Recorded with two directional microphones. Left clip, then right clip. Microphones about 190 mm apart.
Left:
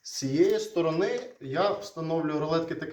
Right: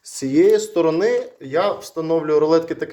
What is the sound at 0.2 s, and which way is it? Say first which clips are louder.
Speech: right 10 dB; 50° right (ahead or behind).